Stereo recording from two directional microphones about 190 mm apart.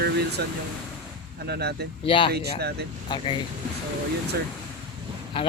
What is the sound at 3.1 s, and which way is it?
Speech, 25° left (ahead or behind).